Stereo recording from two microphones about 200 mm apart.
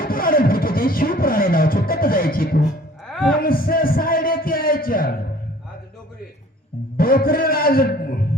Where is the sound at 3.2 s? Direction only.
45° left (ahead or behind).